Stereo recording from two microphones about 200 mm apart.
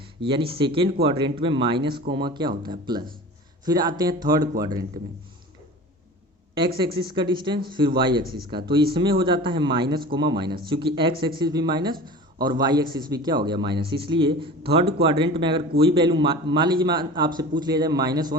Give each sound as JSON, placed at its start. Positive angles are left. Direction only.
{"t": 0.2, "sound": "a man's voice", "side_deg": -25}
{"t": 7.1, "sound": "a man's voice", "side_deg": -25}